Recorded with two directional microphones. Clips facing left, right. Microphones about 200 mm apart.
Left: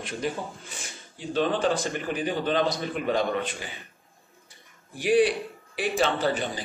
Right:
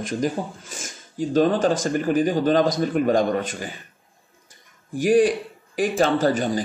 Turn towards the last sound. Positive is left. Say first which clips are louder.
# right 7 dB
turn(degrees=-45)  # may be behind; listen again after turning